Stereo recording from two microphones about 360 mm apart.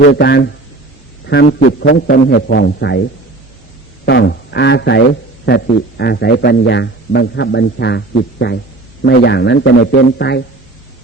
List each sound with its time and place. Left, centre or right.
0.0 s a man's voice: left
4.0 s speech: left